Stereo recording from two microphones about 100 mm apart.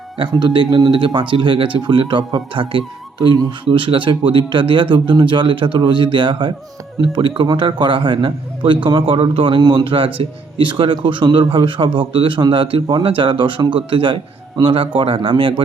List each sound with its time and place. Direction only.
0.2 s speech: 50° right (ahead or behind)
9.6 s speech: 50° right (ahead or behind)